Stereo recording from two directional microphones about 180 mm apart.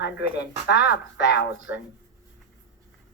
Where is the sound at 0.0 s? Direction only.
70° left (ahead or behind).